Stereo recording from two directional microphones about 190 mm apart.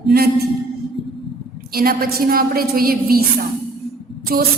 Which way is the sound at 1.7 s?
50° right (ahead or behind).